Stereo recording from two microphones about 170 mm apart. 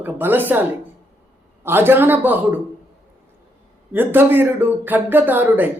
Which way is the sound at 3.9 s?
10° right (ahead or behind).